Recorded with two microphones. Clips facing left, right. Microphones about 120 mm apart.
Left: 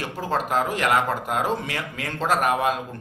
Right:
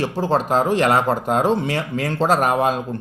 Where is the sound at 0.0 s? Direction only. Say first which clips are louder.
Right 6 dB; 30° right (ahead or behind).